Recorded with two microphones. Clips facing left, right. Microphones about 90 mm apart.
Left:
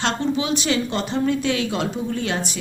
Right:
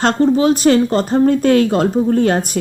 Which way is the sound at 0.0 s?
45° right (ahead or behind).